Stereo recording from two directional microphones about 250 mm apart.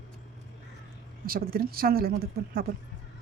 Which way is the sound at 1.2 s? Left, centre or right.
Right.